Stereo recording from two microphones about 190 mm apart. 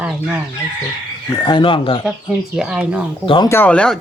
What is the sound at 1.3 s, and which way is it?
Speech, 25° left (ahead or behind).